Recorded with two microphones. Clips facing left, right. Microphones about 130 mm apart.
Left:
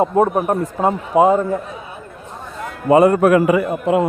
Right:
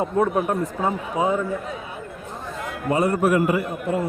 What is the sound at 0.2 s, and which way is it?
Speech, 40° left (ahead or behind).